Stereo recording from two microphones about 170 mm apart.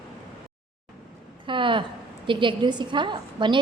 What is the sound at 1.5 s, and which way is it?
A woman's voice, 30° right (ahead or behind).